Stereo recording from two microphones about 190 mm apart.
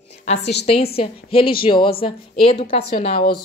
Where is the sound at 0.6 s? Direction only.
30° left (ahead or behind).